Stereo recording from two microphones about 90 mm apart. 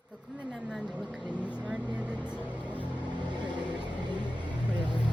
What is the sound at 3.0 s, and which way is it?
Vehicle, 55° right (ahead or behind).